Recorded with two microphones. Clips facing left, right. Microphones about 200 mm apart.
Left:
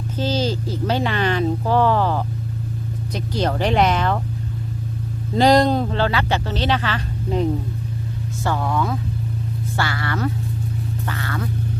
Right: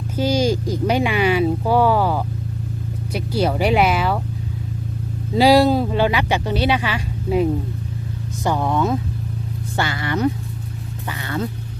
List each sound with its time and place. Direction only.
0.2 s speech: 10° right (ahead or behind)
5.3 s speech: 5° right (ahead or behind)